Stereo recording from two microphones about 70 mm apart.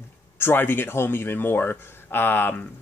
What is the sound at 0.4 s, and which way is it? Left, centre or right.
Speech, left.